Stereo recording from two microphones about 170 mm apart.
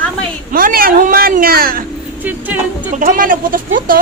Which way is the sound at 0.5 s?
60° right (ahead or behind).